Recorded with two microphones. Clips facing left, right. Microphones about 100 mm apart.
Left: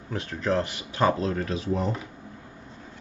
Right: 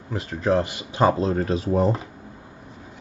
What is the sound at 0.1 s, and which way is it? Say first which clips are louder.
Speech: right 3 dB; 5° right (ahead or behind).